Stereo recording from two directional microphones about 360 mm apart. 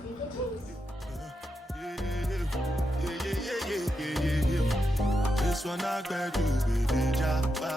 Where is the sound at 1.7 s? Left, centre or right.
Centre.